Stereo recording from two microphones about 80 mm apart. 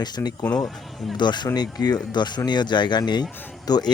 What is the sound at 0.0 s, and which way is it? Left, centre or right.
A man's voice, left.